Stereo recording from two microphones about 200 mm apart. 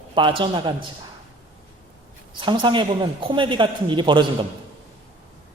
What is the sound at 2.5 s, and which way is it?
A man's voice, 25° right (ahead or behind).